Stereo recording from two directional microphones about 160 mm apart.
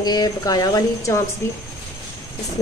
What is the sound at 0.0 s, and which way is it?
Speech, 25° left (ahead or behind).